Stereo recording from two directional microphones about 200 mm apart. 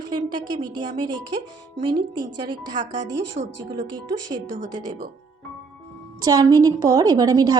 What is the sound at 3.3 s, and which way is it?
Speech, 65° right (ahead or behind).